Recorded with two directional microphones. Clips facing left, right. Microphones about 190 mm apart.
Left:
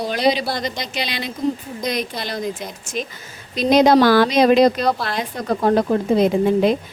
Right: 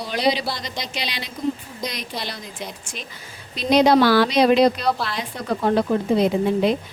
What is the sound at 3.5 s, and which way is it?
A woman's voice, 45° left (ahead or behind).